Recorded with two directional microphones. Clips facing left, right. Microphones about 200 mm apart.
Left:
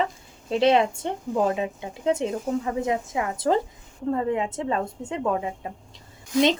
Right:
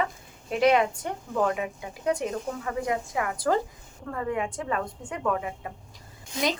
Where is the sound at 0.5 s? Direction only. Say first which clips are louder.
Left 2 dB; 25° left (ahead or behind).